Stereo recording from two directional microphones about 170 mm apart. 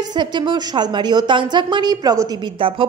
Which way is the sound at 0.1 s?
25° right (ahead or behind).